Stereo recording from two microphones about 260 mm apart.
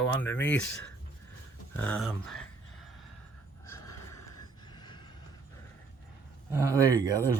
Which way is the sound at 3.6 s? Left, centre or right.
Centre.